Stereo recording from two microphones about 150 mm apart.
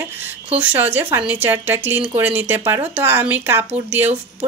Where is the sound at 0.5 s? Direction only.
10° right (ahead or behind).